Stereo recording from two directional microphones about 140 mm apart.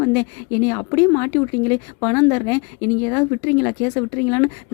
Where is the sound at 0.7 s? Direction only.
20° left (ahead or behind).